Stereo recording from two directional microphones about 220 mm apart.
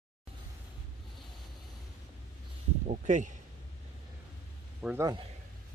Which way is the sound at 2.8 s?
35° right (ahead or behind).